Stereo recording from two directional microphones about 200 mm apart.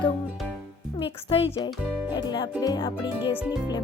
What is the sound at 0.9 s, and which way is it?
Speech, 30° left (ahead or behind).